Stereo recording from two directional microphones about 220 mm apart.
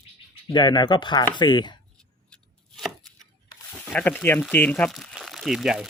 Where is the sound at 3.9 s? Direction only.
5° left (ahead or behind).